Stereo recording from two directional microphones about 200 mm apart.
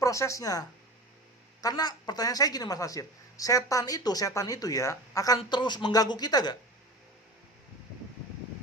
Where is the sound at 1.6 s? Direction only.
20° left (ahead or behind).